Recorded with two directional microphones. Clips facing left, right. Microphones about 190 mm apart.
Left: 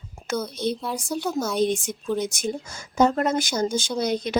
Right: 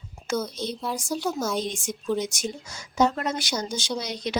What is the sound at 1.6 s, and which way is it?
A woman's voice, 55° left (ahead or behind).